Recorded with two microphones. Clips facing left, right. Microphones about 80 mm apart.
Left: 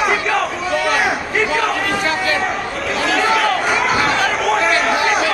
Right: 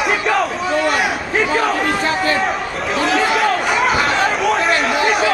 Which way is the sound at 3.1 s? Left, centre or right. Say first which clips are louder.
Left 1 dB; centre.